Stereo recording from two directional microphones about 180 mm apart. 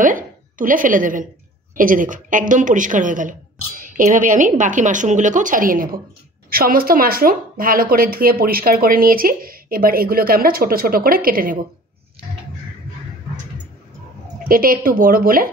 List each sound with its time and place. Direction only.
0.0 s speech: 50° right (ahead or behind)
14.5 s speech: 50° right (ahead or behind)